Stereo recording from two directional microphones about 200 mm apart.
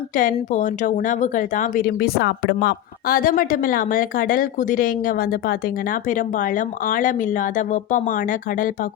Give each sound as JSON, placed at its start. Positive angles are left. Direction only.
{"t": 0.2, "sound": "speech", "side_deg": 40}